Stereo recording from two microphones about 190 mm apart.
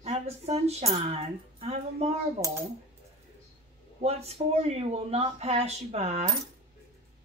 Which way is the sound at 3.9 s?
35° right (ahead or behind).